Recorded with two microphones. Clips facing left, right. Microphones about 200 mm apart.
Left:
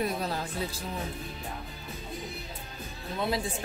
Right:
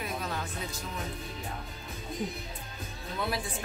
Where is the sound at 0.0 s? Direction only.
35° left (ahead or behind).